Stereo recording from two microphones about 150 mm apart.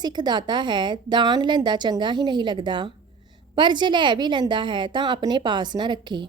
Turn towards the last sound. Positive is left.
turn(degrees=-30)  # may be behind; listen again after turning